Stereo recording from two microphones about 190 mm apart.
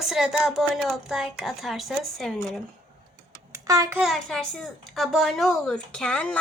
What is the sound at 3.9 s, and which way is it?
Speech, centre (ahead or behind).